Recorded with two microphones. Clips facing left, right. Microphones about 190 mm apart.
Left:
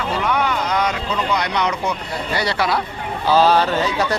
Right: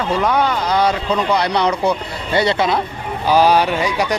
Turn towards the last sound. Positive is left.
turn(degrees=-15)  # may be behind; listen again after turning